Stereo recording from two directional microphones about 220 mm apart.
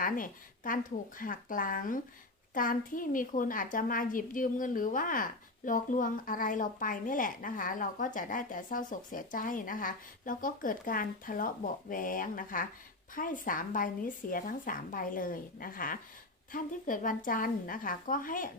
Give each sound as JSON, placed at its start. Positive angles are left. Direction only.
{"t": 0.0, "sound": "a woman's voice", "side_deg": 40}